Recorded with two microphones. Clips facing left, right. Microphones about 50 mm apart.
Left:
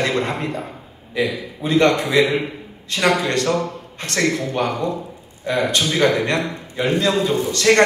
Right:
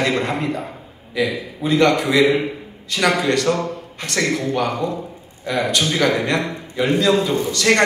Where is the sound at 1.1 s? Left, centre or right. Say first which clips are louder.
Even; left.